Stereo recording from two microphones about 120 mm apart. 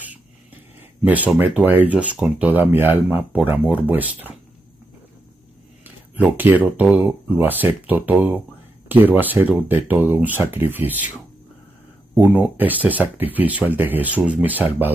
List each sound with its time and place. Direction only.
1.0 s speech: 15° right (ahead or behind)
5.9 s speech: 15° right (ahead or behind)
12.2 s speech: 15° right (ahead or behind)